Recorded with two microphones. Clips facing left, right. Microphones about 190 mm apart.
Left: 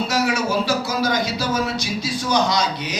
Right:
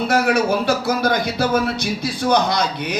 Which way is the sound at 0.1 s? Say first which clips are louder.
Right 7 dB; 55° right (ahead or behind).